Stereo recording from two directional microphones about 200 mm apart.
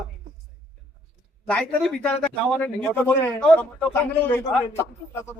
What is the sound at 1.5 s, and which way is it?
A man's voice, 5° left (ahead or behind).